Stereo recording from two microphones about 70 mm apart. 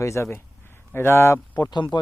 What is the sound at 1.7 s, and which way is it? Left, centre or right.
Speech, left.